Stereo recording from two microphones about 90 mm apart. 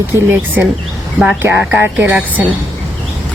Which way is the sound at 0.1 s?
25° right (ahead or behind).